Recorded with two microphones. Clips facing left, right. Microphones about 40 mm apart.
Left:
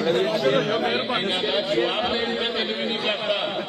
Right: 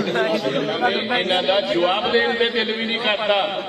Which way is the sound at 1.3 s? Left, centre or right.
Right.